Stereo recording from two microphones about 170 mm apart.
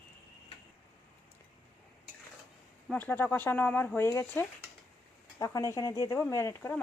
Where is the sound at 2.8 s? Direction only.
10° left (ahead or behind).